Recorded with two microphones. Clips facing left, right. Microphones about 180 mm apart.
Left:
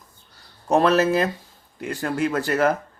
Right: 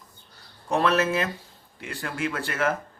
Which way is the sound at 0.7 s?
40° left (ahead or behind).